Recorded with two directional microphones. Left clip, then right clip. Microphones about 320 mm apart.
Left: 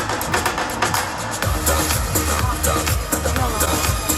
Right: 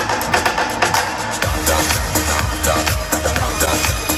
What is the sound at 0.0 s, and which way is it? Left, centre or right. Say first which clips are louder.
Music: right 4 dB; right.